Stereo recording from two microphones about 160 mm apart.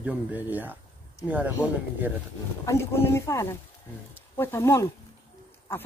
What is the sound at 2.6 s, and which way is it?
Speech, 15° left (ahead or behind).